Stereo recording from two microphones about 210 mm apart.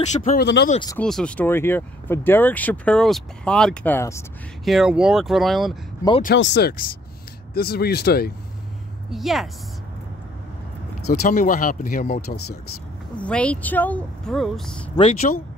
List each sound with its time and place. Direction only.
0.1 s speech: 35° left (ahead or behind)
0.4 s speech: 50° left (ahead or behind)
0.9 s speech: 5° left (ahead or behind)
4.6 s speech: centre (ahead or behind)
6.3 s speech: 55° left (ahead or behind)
9.1 s speech: centre (ahead or behind)
11.1 s speech: 40° left (ahead or behind)
13.2 s speech: 5° left (ahead or behind)
15.3 s speech: 35° left (ahead or behind)